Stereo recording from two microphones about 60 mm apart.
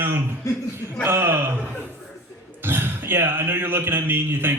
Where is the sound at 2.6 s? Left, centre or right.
Right.